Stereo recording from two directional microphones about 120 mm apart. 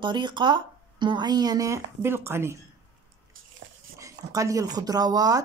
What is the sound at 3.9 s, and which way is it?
Speech, 25° right (ahead or behind).